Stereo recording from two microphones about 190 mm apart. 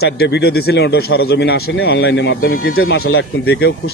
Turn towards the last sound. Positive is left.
turn(degrees=60)  # may be behind; listen again after turning